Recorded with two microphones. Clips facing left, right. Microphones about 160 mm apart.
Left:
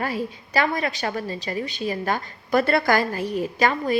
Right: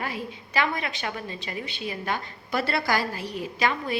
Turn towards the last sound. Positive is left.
turn(degrees=45)  # may be behind; listen again after turning